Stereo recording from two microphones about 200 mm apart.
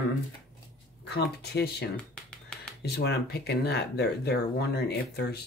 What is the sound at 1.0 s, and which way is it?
Speech, 55° left (ahead or behind).